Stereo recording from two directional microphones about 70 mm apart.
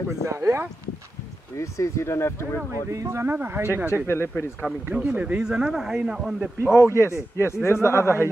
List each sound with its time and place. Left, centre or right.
0.2 s speech: right
1.6 s a man's voice: left
2.7 s speech: right
3.3 s speech: right
3.9 s a man's voice: left
4.9 s a man's voice: centre
6.6 s a man's voice: left